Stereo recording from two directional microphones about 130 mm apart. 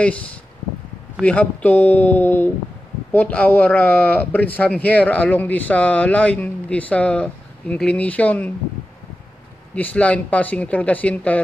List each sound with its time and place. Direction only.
1.2 s speech: 10° left (ahead or behind)
9.8 s speech: 10° left (ahead or behind)